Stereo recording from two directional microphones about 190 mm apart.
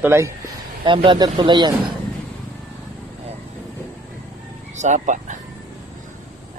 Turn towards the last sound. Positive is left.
turn(degrees=-40)  # may be behind; listen again after turning